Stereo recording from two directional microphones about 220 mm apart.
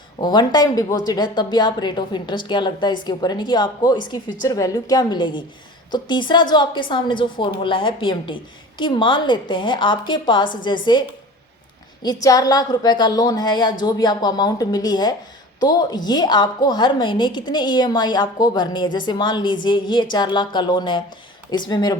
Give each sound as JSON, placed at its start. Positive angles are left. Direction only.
{"t": 0.2, "sound": "a woman's voice", "side_deg": 20}
{"t": 12.0, "sound": "a woman's voice", "side_deg": 15}